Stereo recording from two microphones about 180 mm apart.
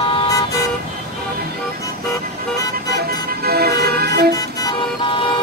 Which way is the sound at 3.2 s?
60° right (ahead or behind).